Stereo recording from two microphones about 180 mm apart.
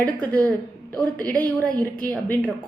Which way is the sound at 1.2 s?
50° left (ahead or behind).